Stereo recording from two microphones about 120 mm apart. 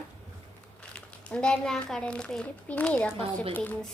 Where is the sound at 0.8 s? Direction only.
10° left (ahead or behind).